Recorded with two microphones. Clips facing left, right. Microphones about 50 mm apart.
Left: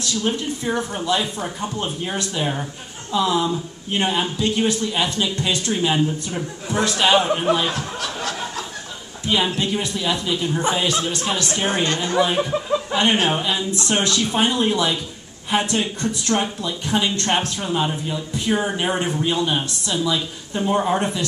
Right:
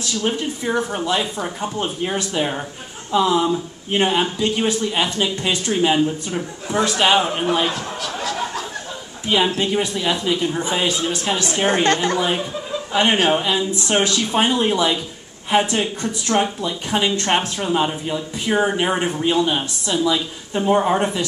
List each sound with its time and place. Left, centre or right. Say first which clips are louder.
0.2 s speech: right 2 dB; right
0.7 s speech: right 1 dB; centre
9.2 s speech: right 2 dB; centre
11.8 s a woman's voice: right 4 dB; right
12.9 s speech: right 4 dB; centre